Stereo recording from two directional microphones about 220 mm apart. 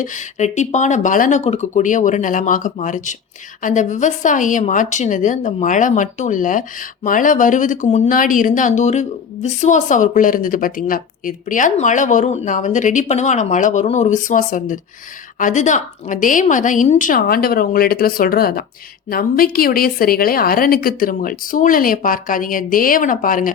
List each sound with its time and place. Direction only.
0.0 s a woman's voice: 35° left (ahead or behind)